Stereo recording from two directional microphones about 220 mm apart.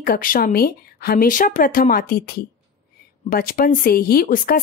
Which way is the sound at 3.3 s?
40° left (ahead or behind).